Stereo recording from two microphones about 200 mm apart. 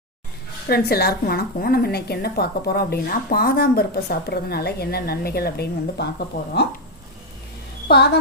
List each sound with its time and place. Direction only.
0.7 s a woman's voice: 50° left (ahead or behind)
7.9 s a woman's voice: 55° left (ahead or behind)